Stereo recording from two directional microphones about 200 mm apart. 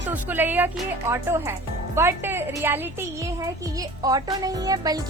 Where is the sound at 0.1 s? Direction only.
10° right (ahead or behind).